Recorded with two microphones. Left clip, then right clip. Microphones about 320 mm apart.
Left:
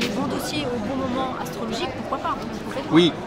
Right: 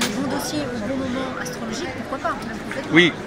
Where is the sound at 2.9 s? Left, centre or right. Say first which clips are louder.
Right 2 dB; centre.